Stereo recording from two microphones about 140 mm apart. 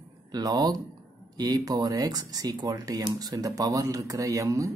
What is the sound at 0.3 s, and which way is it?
Speech, 30° right (ahead or behind).